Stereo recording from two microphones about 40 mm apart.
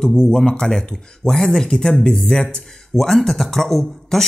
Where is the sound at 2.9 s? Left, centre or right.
Centre.